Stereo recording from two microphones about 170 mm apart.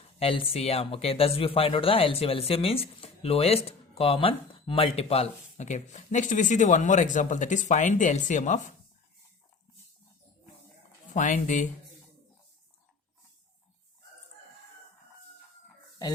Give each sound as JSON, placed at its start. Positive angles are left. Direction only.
{"t": 0.2, "sound": "speech", "side_deg": 35}
{"t": 11.1, "sound": "speech", "side_deg": 45}